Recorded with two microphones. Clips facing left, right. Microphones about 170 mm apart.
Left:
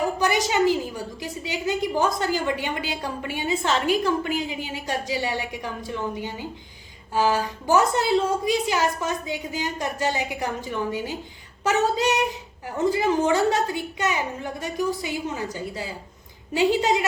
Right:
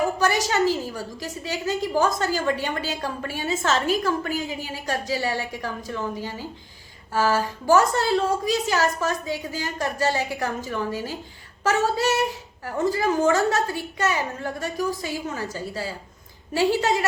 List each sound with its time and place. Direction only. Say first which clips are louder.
0.2 s a woman's voice: even; 20° left (ahead or behind)